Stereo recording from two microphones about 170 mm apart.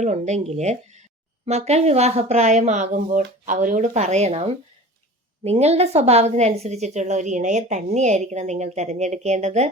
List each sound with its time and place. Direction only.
0.0 s a woman's voice: 40° right (ahead or behind)